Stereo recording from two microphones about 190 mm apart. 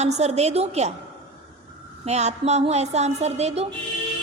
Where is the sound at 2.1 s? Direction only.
35° right (ahead or behind).